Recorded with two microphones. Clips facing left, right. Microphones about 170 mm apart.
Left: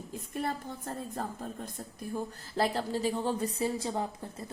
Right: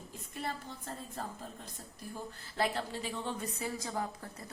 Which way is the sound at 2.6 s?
40° left (ahead or behind).